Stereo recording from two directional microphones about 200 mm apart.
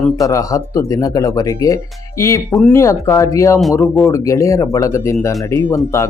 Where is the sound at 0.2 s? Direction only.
15° left (ahead or behind).